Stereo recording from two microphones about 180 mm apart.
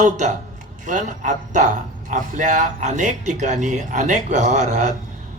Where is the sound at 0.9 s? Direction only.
45° right (ahead or behind).